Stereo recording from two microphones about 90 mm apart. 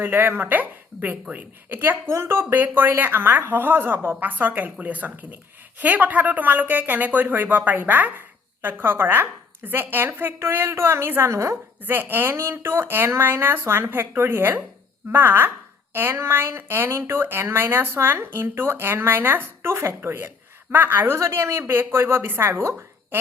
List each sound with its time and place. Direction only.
0.0 s a woman's voice: 25° right (ahead or behind)